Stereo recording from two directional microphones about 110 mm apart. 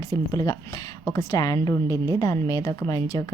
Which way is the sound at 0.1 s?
35° left (ahead or behind).